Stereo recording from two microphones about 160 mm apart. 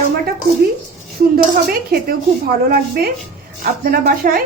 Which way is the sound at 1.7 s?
65° right (ahead or behind).